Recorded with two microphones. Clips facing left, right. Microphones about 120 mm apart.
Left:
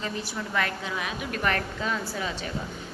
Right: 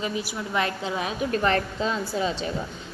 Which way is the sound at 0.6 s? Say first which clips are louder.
Right 3 dB; 25° right (ahead or behind).